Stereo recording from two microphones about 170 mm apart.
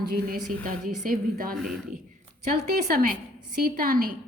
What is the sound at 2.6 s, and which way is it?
A woman's voice, 55° right (ahead or behind).